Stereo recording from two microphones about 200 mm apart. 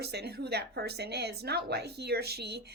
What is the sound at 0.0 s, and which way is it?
A woman's voice, 55° right (ahead or behind).